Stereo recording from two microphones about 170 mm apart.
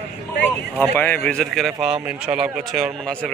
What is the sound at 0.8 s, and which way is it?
Speech, 10° left (ahead or behind).